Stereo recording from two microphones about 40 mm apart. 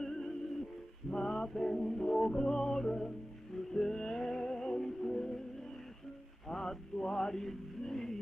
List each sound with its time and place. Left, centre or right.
0.0 s music: centre
6.4 s music: centre